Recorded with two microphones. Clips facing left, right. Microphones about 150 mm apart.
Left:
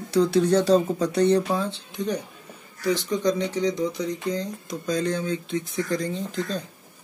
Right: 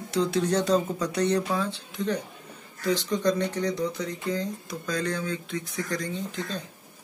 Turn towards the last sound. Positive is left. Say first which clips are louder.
# left 4 dB
turn(degrees=35)  # may be behind; listen again after turning